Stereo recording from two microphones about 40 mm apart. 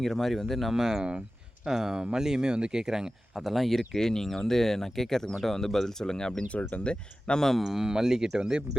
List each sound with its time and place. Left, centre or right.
0.0 s speech: centre
0.7 s speech: centre
3.3 s speech: centre
6.5 s speech: left
6.8 s speech: left
7.6 s speech: centre